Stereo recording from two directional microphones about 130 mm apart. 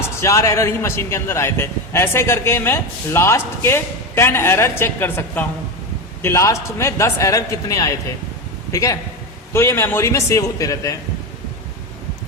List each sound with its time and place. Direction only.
0.2 s a man's voice: 20° left (ahead or behind)